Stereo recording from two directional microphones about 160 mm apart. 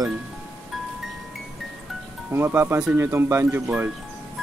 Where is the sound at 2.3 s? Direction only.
15° right (ahead or behind).